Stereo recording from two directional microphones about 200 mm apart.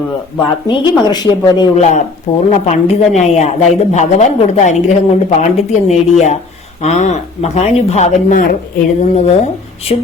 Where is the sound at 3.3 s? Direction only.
35° left (ahead or behind).